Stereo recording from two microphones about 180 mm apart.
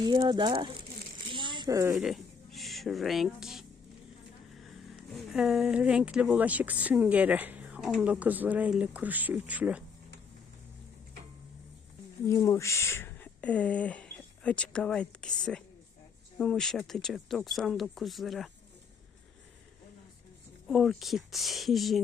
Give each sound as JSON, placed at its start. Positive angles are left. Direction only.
{"t": 0.0, "sound": "speech", "side_deg": -25}
{"t": 1.3, "sound": "a sound", "side_deg": -25}
{"t": 2.0, "sound": "speech", "side_deg": 0}
{"t": 12.2, "sound": "speech", "side_deg": 15}
{"t": 20.7, "sound": "speech", "side_deg": 0}